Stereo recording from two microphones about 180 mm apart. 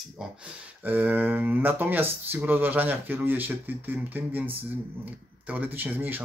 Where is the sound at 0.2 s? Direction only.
Centre (ahead or behind).